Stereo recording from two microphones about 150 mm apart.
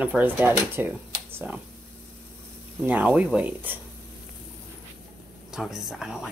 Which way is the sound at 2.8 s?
10° right (ahead or behind).